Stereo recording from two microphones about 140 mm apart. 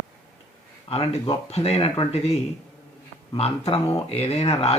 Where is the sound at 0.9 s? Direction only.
45° left (ahead or behind).